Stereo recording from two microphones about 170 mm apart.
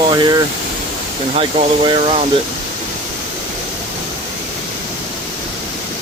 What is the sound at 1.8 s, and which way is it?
Speech, 30° right (ahead or behind).